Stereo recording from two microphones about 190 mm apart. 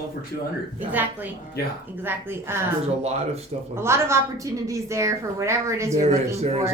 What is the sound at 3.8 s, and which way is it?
Speech, 15° right (ahead or behind).